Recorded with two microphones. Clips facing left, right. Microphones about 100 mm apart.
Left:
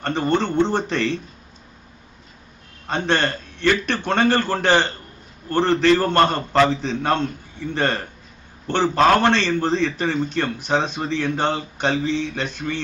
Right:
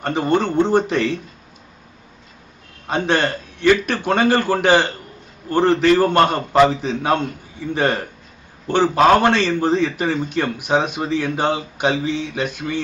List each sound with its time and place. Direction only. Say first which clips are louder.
0.0 s a man's voice: right 2 dB; 10° right (ahead or behind)
3.1 s a man's voice: right 1 dB; 10° right (ahead or behind)